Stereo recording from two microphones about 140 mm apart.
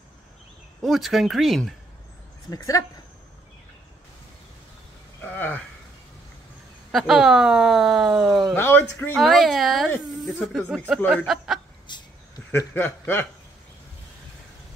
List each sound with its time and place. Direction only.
0.8 s speech: centre (ahead or behind)
2.5 s speech: 25° left (ahead or behind)
5.2 s a sound: 10° left (ahead or behind)
6.9 s speech: centre (ahead or behind)
8.5 s speech: 15° left (ahead or behind)
9.1 s speech: centre (ahead or behind)
11.9 s a sound: 35° left (ahead or behind)
12.4 s speech: 15° left (ahead or behind)